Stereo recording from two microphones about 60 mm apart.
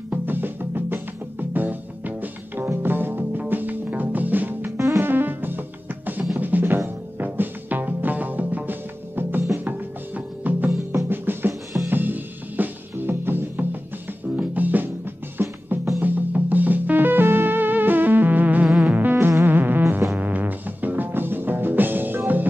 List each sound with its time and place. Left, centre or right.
0.1 s music: right
4.7 s music: right
5.1 s music: right
6.3 s drum: right
7.2 s music: right
15.4 s music: right
16.0 s music: right
19.1 s music: right
19.4 s music: right